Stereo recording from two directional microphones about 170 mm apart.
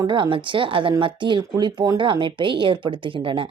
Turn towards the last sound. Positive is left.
turn(degrees=-30)  # may be behind; listen again after turning